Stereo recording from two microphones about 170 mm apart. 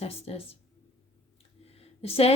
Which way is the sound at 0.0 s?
35° left (ahead or behind).